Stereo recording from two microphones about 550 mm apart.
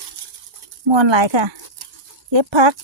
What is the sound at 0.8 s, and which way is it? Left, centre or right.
Speech, right.